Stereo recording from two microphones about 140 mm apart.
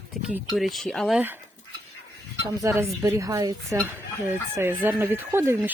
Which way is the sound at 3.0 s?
25° right (ahead or behind).